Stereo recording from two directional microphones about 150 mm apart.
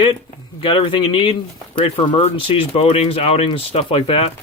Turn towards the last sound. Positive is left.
turn(degrees=40)  # may be behind; listen again after turning